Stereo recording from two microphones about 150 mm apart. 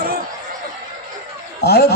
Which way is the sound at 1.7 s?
90° left.